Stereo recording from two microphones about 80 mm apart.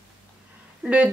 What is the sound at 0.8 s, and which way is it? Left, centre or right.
Speech, centre.